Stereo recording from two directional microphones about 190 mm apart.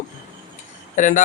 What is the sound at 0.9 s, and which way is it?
Speech, 40° left (ahead or behind).